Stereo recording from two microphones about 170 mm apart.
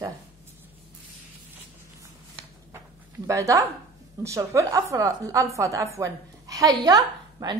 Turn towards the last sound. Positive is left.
turn(degrees=-25)  # may be behind; listen again after turning